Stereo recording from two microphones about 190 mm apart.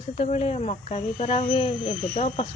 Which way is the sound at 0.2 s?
30° left (ahead or behind).